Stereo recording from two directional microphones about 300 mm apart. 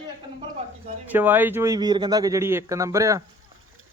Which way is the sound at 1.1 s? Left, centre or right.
Centre.